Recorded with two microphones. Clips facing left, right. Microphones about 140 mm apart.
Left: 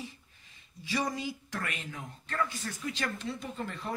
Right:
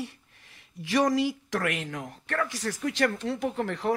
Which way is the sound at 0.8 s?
90° right.